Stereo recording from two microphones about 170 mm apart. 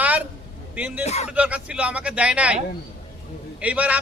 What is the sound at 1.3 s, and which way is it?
A man's voice, 5° right (ahead or behind).